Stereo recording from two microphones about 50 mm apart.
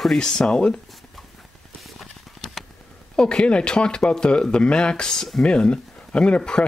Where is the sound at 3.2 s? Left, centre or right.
Centre.